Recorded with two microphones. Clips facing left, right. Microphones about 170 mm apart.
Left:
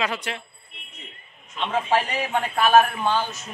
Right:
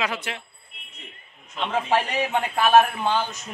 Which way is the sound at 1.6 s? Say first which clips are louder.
Even; 10° right (ahead or behind).